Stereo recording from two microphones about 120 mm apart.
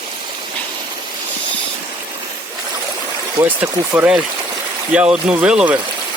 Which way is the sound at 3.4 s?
20° right (ahead or behind).